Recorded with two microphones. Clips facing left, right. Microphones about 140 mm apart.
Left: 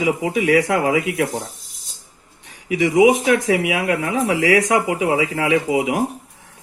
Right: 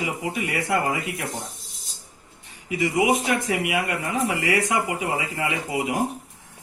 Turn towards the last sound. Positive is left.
turn(degrees=90)